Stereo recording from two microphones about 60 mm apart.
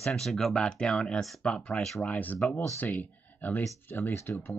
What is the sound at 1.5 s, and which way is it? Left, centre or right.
Speech, centre.